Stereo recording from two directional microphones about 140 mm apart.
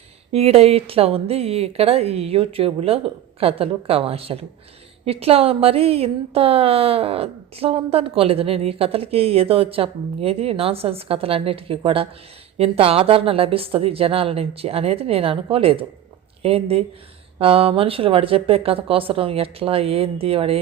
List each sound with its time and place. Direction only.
0.3 s a woman's voice: 45° right (ahead or behind)